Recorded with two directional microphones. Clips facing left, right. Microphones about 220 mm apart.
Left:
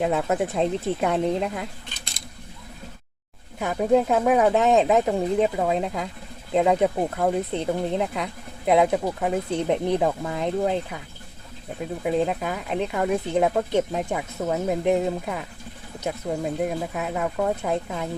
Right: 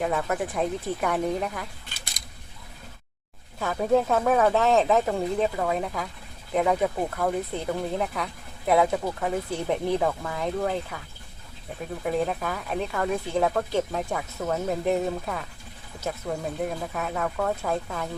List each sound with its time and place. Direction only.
0.0 s speech: 20° left (ahead or behind)
2.2 s a sound: centre (ahead or behind)
3.6 s speech: 15° left (ahead or behind)
12.0 s speech: 15° left (ahead or behind)